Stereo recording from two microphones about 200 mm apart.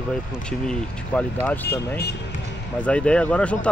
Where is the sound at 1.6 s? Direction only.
55° left (ahead or behind).